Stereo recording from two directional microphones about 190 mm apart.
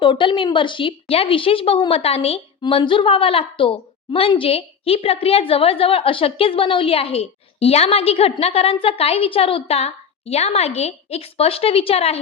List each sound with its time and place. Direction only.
0.0 s a woman's voice: 25° left (ahead or behind)